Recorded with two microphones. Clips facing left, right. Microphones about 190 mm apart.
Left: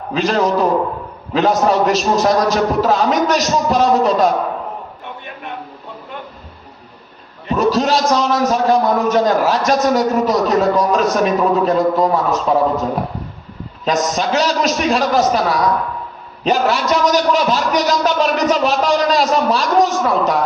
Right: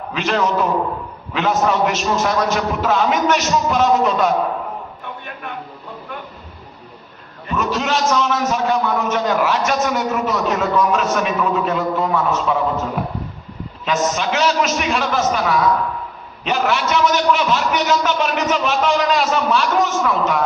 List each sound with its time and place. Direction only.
0.1 s a man's voice: 35° left (ahead or behind)
7.5 s a man's voice: 35° left (ahead or behind)
13.8 s a man's voice: 40° left (ahead or behind)